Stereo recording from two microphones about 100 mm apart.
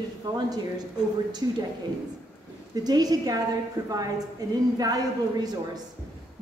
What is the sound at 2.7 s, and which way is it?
Speech, 40° right (ahead or behind).